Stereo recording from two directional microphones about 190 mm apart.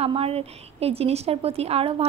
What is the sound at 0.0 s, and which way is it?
A woman's voice, 30° right (ahead or behind).